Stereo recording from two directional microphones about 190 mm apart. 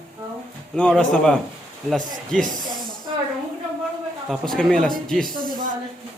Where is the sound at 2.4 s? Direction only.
45° right (ahead or behind).